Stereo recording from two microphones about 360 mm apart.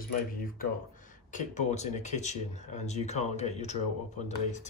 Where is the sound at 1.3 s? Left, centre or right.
Centre.